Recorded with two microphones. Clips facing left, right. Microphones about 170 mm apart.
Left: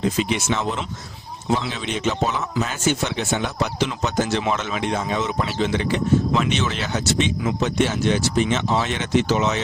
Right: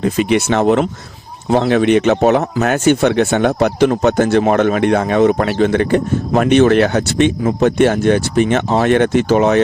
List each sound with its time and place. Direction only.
0.0 s speech: 60° right (ahead or behind)